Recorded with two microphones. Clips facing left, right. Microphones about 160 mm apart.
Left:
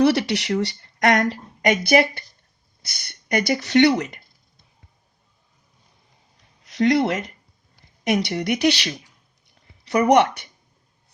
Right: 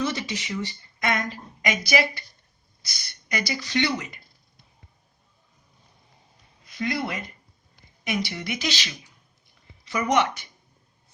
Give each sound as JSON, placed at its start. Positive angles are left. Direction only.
{"t": 0.0, "sound": "speech", "side_deg": 70}
{"t": 6.7, "sound": "speech", "side_deg": 80}
{"t": 10.1, "sound": "speech", "side_deg": 65}